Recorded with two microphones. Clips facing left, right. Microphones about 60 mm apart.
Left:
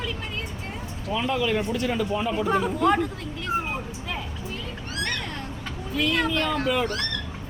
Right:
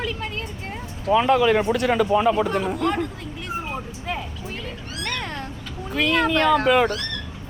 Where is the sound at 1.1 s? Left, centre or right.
Right.